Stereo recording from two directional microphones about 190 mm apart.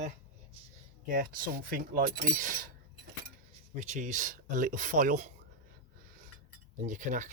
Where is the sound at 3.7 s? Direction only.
40° right (ahead or behind).